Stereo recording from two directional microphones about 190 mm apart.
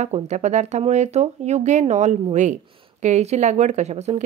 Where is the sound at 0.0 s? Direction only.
35° right (ahead or behind).